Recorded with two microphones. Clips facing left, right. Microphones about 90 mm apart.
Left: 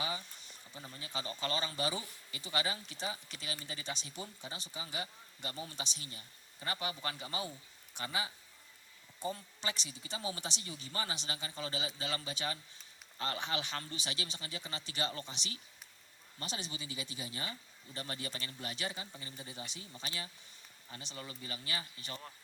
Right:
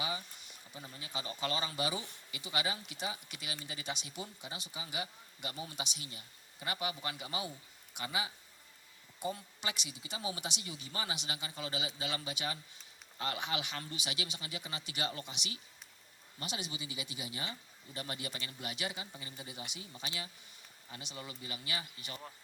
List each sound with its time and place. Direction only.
0.0 s a sound: 35° left (ahead or behind)
2.3 s speech: 35° left (ahead or behind)
7.9 s speech: 35° left (ahead or behind)